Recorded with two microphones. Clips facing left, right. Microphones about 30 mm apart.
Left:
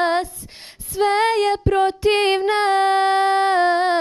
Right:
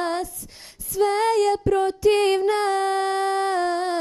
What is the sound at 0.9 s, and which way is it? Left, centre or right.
Female singing, left.